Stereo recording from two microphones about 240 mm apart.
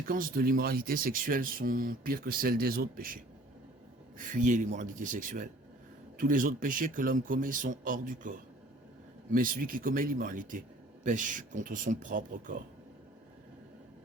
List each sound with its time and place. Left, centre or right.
0.0 s speech: right
4.2 s speech: right